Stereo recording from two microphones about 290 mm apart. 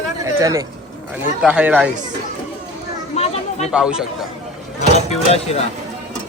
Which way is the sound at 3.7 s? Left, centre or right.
Centre.